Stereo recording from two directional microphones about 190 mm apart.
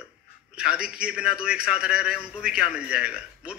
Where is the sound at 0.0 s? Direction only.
5° right (ahead or behind).